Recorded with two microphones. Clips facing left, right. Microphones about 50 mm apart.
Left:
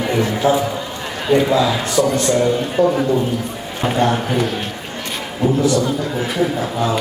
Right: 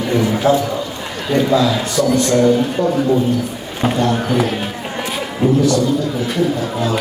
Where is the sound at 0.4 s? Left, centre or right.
Centre.